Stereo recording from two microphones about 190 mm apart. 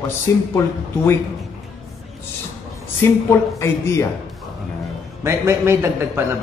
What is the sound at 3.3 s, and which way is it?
Speech, 15° left (ahead or behind).